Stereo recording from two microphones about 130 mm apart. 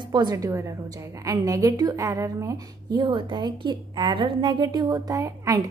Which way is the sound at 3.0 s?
35° right (ahead or behind).